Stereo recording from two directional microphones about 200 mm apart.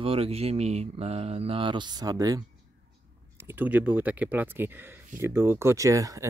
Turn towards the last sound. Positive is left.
turn(degrees=-15)  # may be behind; listen again after turning